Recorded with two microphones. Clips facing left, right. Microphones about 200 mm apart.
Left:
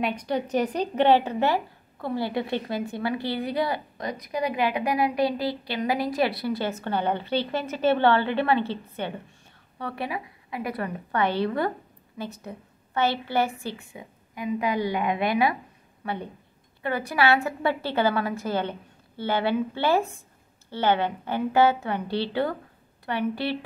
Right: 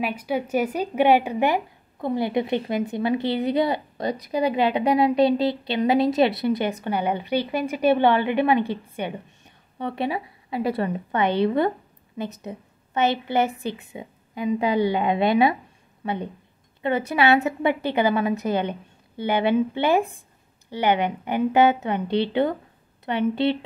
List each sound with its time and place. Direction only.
0.0 s a woman's voice: 5° right (ahead or behind)